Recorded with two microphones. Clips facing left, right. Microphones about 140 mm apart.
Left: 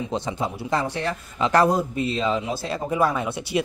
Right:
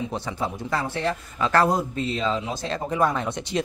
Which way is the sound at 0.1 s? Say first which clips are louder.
Left 2 dB; 20° left (ahead or behind).